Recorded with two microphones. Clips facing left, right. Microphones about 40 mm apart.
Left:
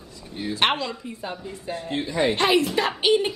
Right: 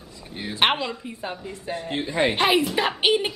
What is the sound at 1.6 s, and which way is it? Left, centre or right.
A woman's voice, right.